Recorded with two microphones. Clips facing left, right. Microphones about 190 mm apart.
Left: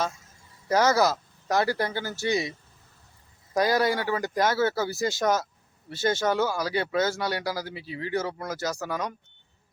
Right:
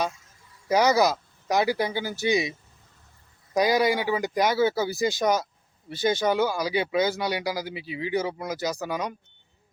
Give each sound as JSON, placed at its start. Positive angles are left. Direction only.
{"t": 0.7, "sound": "speech", "side_deg": -15}